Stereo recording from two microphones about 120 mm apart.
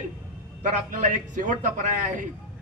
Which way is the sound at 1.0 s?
90° right.